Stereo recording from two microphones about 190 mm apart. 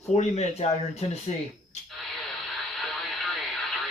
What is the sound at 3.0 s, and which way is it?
Radio, centre (ahead or behind).